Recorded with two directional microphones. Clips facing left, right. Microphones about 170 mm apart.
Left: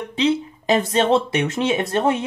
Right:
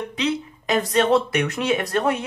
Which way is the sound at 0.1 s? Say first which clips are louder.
Left 8 dB; 25° left (ahead or behind).